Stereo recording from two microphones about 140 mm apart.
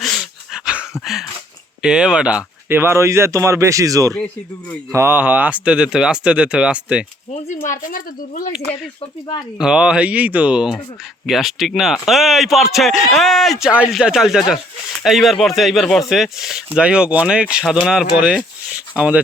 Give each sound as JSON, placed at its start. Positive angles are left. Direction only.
{"t": 0.0, "sound": "dog", "side_deg": 0}
{"t": 1.8, "sound": "speech", "side_deg": -5}
{"t": 7.4, "sound": "a woman's voice", "side_deg": 65}
{"t": 9.0, "sound": "speech", "side_deg": 35}
{"t": 9.6, "sound": "speech", "side_deg": -5}